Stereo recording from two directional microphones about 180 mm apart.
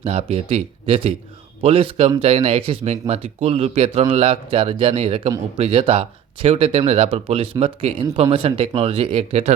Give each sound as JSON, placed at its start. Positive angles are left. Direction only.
{"t": 0.0, "sound": "speech", "side_deg": -35}